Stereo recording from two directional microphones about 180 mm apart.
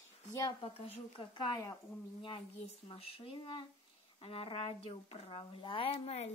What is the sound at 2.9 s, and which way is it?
Speech, 30° left (ahead or behind).